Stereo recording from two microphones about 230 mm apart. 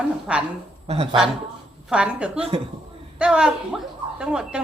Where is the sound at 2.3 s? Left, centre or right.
Right.